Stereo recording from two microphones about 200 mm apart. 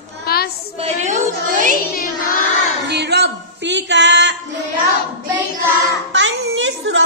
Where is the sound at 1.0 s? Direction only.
40° right (ahead or behind).